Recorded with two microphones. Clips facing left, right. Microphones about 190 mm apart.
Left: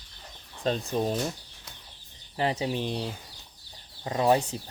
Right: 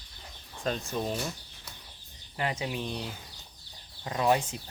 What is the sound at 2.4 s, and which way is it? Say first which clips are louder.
Speech: left 5 dB; 35° left (ahead or behind).